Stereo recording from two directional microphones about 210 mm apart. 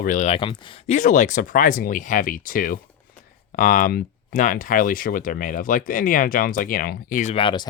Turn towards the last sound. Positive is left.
turn(degrees=25)  # may be behind; listen again after turning